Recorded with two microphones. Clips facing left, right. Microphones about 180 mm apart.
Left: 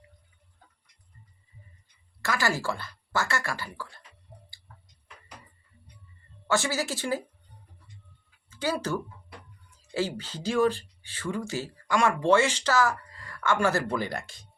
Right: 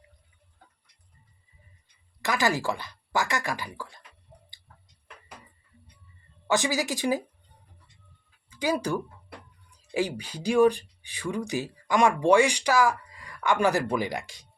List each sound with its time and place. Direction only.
2.2 s speech: 20° right (ahead or behind)
6.5 s speech: 15° right (ahead or behind)
8.4 s speech: 15° right (ahead or behind)